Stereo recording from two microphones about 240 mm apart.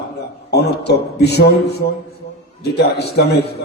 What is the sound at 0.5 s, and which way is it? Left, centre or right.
A man's voice, left.